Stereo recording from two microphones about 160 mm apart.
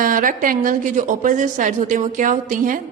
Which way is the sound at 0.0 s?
55° right (ahead or behind).